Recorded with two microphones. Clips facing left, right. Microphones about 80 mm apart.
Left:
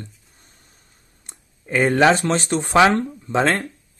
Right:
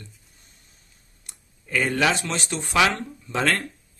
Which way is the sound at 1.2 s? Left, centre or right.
Left.